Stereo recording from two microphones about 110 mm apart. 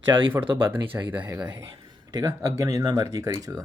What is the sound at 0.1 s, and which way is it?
Speech, 45° right (ahead or behind).